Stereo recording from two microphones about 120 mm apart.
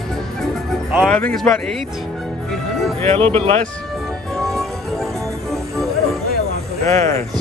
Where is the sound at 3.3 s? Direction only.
55° right (ahead or behind).